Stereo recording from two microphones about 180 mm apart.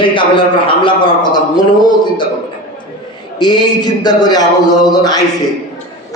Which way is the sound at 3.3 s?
25° left (ahead or behind).